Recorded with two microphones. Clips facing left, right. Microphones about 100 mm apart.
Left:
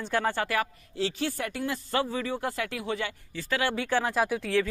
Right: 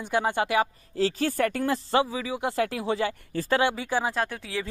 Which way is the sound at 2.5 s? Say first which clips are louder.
Right 5 dB; 30° right (ahead or behind).